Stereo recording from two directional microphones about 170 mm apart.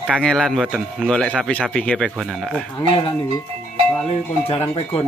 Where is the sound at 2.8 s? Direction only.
30° left (ahead or behind).